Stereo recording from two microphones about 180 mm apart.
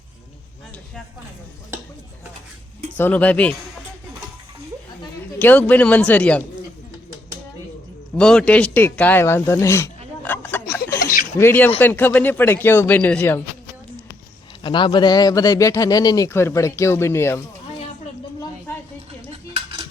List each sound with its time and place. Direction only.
3.0 s speech: 10° left (ahead or behind)
5.4 s speech: 10° left (ahead or behind)
8.1 s speech: 5° left (ahead or behind)
10.2 s a sound: 10° left (ahead or behind)
11.0 s a sound: 50° left (ahead or behind)
11.3 s speech: 10° left (ahead or behind)
14.6 s speech: 25° left (ahead or behind)
18.3 s a sound: 10° left (ahead or behind)
19.3 s cutlery: 30° right (ahead or behind)